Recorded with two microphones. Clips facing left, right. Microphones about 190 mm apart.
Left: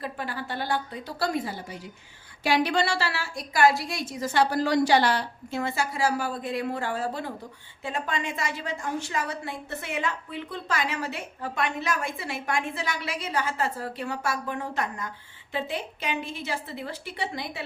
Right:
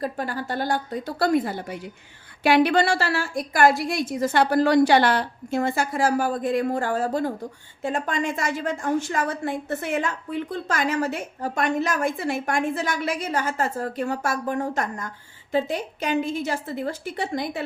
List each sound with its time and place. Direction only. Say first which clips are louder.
0.0 s a woman's voice: right 5 dB; 45° right (ahead or behind)